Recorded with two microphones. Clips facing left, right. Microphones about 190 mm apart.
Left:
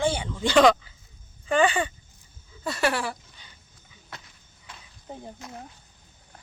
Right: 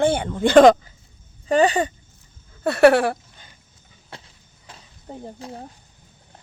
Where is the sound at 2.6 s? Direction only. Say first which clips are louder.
Right 12 dB; 60° right (ahead or behind).